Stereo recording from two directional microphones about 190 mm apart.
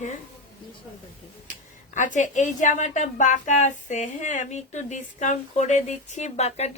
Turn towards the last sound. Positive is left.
turn(degrees=35)  # may be behind; listen again after turning